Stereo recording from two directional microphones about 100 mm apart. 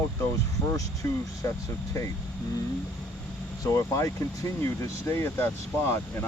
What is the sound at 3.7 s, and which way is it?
Speech, 30° left (ahead or behind).